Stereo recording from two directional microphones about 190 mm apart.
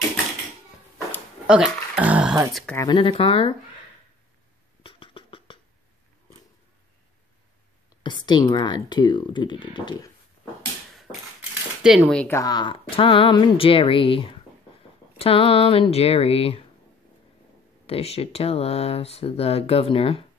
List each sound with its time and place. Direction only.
1.5 s speech: 5° right (ahead or behind)
2.6 s speech: 10° left (ahead or behind)
2.9 s speech: 25° left (ahead or behind)
4.8 s beatboxing: 25° left (ahead or behind)
8.0 s a woman's voice: 25° left (ahead or behind)
11.8 s speech: 5° right (ahead or behind); by 16.6 s 30° left (ahead or behind)
17.8 s speech: 30° left (ahead or behind)